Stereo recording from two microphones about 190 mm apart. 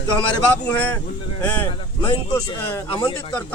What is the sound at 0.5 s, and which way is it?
Speech, 10° left (ahead or behind).